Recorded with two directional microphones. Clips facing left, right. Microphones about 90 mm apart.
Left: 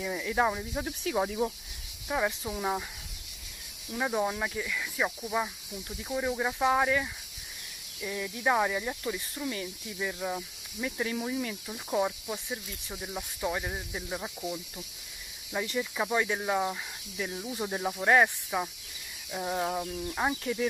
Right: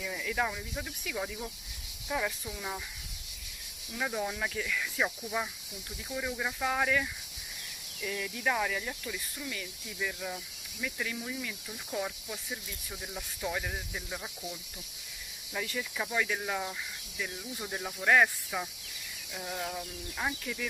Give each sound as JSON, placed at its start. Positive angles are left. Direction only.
{"t": 0.0, "sound": "cricket", "side_deg": 25}
{"t": 2.0, "sound": "speech", "side_deg": 25}
{"t": 2.4, "sound": "cricket", "side_deg": 40}
{"t": 4.0, "sound": "speech", "side_deg": 20}
{"t": 6.0, "sound": "cricket", "side_deg": 20}
{"t": 9.4, "sound": "cricket", "side_deg": 35}
{"t": 9.9, "sound": "cricket", "side_deg": 20}
{"t": 10.3, "sound": "cricket", "side_deg": 30}
{"t": 11.7, "sound": "cricket", "side_deg": 20}
{"t": 15.5, "sound": "cricket", "side_deg": 25}
{"t": 19.3, "sound": "cricket", "side_deg": 40}